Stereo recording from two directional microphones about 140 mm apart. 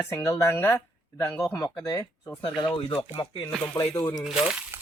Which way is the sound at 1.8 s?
25° left (ahead or behind).